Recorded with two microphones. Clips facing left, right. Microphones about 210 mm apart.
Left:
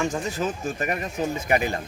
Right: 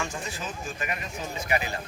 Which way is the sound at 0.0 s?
40° left (ahead or behind).